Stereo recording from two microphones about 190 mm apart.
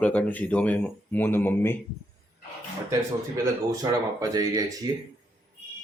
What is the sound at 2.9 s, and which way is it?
Speech, 20° right (ahead or behind).